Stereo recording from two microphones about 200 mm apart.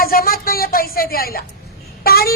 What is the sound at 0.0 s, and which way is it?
Speech, 45° left (ahead or behind).